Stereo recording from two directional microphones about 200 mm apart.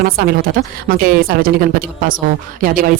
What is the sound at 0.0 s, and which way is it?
Speech, 45° right (ahead or behind).